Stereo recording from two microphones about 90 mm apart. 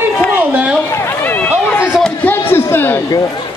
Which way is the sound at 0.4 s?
15° right (ahead or behind).